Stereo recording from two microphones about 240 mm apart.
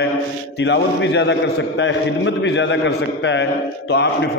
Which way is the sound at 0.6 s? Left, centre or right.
Left.